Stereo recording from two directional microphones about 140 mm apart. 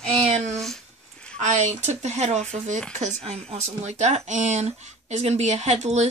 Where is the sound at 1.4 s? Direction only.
55° right (ahead or behind).